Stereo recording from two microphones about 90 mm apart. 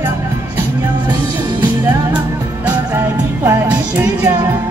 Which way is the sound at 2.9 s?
40° right (ahead or behind).